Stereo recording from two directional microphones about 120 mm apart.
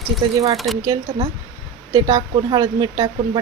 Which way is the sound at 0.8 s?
35° right (ahead or behind).